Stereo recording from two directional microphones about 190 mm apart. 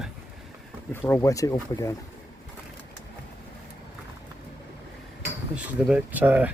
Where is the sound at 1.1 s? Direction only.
15° left (ahead or behind).